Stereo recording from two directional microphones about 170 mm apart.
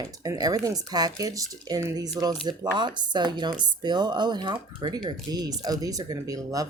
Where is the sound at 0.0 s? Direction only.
20° right (ahead or behind).